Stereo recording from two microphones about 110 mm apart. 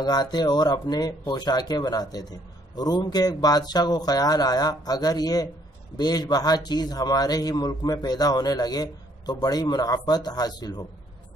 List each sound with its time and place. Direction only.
0.0 s a man's voice: 40° left (ahead or behind)